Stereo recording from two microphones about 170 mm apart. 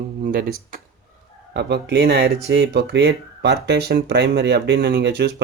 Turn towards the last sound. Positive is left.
turn(degrees=-75)  # may be behind; listen again after turning